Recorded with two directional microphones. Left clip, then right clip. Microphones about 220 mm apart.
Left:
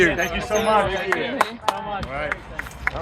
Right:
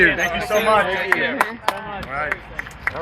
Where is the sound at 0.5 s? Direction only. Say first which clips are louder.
Right 2 dB; 45° right (ahead or behind).